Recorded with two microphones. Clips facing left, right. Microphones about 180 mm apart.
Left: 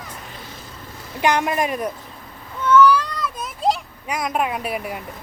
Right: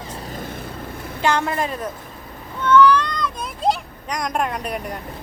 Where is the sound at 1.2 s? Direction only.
15° left (ahead or behind).